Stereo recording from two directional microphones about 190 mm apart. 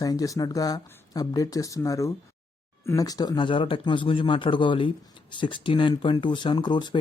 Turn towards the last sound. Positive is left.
turn(degrees=25)  # may be behind; listen again after turning